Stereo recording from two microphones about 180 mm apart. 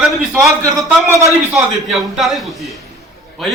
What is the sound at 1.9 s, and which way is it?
Speech, centre (ahead or behind).